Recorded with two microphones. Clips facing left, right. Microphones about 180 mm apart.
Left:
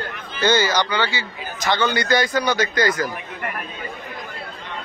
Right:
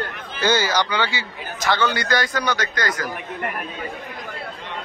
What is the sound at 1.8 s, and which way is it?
Speech, centre (ahead or behind).